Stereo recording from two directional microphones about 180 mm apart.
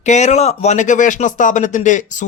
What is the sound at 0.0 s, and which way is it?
Speech, 40° left (ahead or behind).